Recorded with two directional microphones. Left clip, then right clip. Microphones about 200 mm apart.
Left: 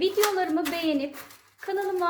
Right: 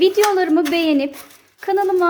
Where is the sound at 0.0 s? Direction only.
50° right (ahead or behind).